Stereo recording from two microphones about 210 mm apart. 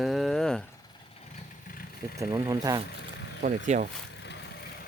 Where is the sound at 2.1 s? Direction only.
15° right (ahead or behind).